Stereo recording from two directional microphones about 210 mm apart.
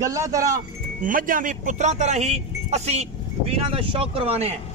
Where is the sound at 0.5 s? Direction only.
40° right (ahead or behind).